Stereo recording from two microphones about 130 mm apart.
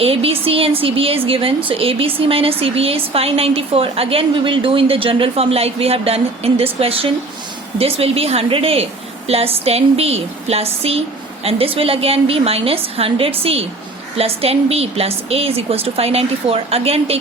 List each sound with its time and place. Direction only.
0.0 s a woman's voice: 45° right (ahead or behind)